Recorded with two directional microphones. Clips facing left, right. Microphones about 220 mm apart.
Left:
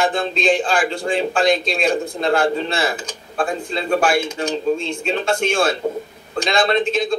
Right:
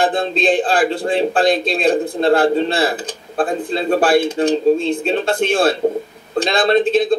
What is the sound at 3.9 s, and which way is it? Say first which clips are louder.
A man's voice: right 4 dB; 35° right (ahead or behind).